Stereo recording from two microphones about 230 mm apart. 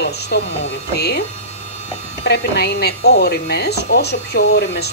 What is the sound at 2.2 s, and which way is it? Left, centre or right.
Speech, left.